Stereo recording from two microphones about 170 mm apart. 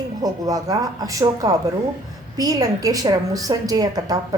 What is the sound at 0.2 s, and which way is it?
A woman's voice, 20° right (ahead or behind).